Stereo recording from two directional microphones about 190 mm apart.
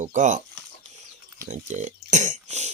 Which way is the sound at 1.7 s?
40° right (ahead or behind).